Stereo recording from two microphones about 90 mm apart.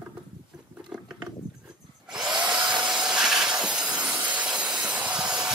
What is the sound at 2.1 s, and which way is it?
Tools, 5° right (ahead or behind).